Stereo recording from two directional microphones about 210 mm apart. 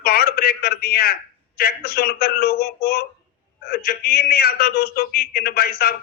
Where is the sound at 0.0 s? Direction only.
45° left (ahead or behind).